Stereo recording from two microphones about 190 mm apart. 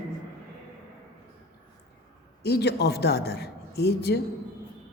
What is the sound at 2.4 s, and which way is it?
A man's voice, 60° left (ahead or behind).